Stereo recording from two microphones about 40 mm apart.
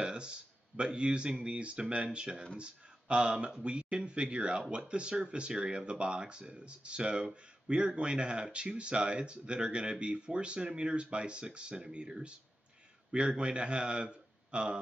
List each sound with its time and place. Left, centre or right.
0.0 s a man's voice: right